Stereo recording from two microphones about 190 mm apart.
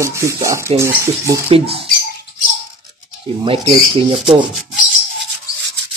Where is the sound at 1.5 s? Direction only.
30° right (ahead or behind).